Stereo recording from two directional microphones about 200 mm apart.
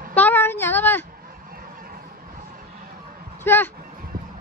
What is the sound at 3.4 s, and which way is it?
Speech, 10° left (ahead or behind).